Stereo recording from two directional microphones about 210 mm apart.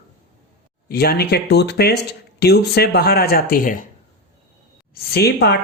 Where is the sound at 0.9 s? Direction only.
45° left (ahead or behind).